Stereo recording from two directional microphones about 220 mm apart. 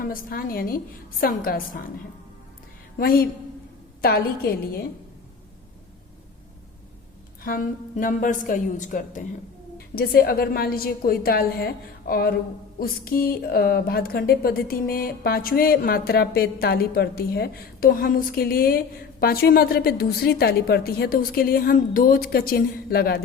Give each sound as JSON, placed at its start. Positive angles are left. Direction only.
{"t": 0.0, "sound": "a woman's voice", "side_deg": 40}
{"t": 3.0, "sound": "a woman's voice", "side_deg": 40}
{"t": 7.4, "sound": "a woman's voice", "side_deg": 40}